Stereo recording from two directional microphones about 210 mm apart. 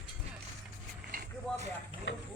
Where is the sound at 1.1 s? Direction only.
40° right (ahead or behind).